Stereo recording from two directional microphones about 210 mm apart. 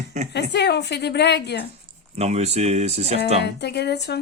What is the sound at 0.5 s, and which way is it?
Speech, 55° left (ahead or behind).